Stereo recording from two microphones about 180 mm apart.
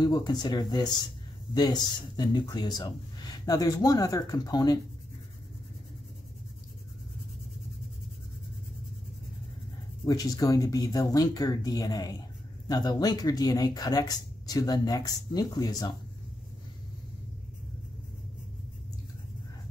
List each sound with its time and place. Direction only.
0.0 s speech: 25° left (ahead or behind)
10.0 s speech: 20° left (ahead or behind)